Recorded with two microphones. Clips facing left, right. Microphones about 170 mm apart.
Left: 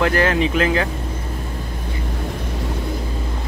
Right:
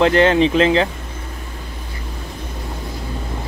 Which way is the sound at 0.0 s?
25° right (ahead or behind).